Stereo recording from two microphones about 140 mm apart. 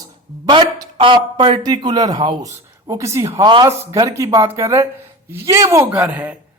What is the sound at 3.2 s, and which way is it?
Speech, 35° right (ahead or behind).